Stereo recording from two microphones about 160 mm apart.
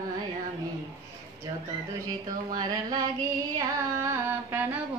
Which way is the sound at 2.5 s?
25° right (ahead or behind).